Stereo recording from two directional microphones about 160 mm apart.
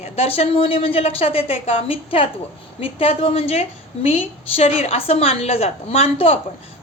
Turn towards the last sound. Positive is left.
turn(degrees=40)  # may be behind; listen again after turning